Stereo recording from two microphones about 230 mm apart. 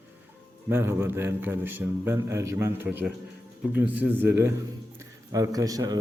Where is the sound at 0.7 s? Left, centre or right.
Centre.